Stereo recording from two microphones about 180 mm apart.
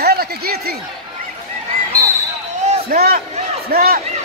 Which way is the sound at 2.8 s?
55° right (ahead or behind).